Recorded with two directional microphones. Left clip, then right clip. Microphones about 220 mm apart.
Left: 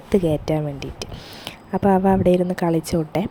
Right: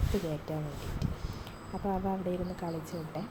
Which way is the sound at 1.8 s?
45° left (ahead or behind).